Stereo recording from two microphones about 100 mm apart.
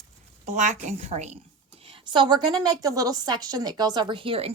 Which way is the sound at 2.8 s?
35° right (ahead or behind).